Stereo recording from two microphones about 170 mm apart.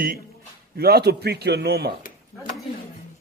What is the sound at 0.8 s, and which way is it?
Speech, 70° right (ahead or behind).